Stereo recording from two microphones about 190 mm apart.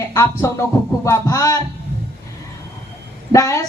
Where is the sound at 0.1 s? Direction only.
15° left (ahead or behind).